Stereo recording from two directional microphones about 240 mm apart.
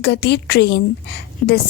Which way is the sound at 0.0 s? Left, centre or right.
Left.